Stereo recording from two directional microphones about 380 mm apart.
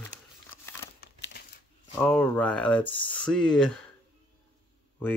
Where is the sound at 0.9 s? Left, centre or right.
Left.